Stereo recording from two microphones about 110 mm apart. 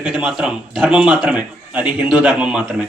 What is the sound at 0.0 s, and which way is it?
A man's voice, 10° right (ahead or behind).